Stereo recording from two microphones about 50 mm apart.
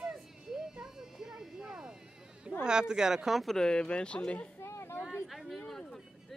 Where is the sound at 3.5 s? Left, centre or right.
Centre.